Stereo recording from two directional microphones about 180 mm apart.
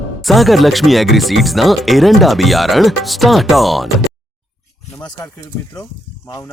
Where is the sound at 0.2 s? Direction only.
Centre (ahead or behind).